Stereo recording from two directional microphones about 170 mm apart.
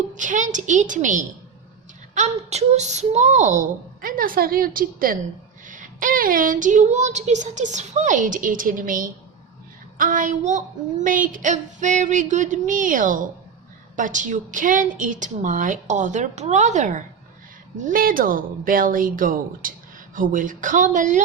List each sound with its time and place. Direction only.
0.1 s a woman's voice: 50° right (ahead or behind)